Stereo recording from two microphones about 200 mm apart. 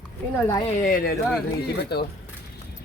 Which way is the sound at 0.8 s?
45° left (ahead or behind).